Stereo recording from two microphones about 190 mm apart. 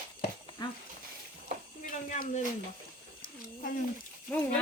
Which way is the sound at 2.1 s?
40° left (ahead or behind).